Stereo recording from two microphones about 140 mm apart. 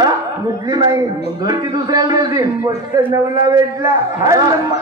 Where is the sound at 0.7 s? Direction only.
30° right (ahead or behind).